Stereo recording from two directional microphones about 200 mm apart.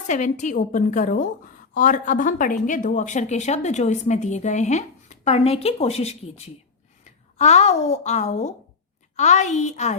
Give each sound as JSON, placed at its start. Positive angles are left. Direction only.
{"t": 0.1, "sound": "a woman's voice", "side_deg": 40}